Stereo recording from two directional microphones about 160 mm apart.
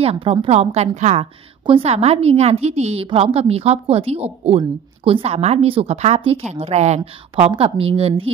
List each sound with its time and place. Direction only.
0.0 s a woman's voice: 40° right (ahead or behind)